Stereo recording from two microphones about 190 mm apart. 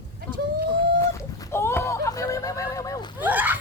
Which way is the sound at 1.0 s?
15° left (ahead or behind).